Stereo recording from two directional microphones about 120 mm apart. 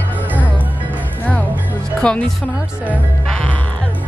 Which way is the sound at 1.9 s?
10° left (ahead or behind).